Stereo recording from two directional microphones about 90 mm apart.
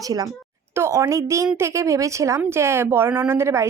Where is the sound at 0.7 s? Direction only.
30° right (ahead or behind).